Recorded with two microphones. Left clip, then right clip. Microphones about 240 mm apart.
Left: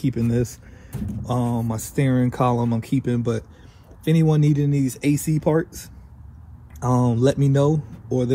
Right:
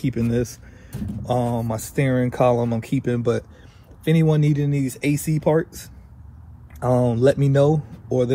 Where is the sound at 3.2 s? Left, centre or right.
Centre.